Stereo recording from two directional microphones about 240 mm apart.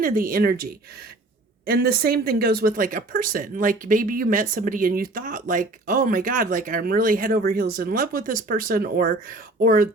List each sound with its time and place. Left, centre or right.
0.0 s speech: right